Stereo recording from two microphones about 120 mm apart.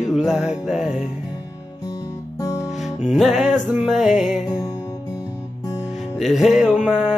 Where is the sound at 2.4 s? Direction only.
25° left (ahead or behind).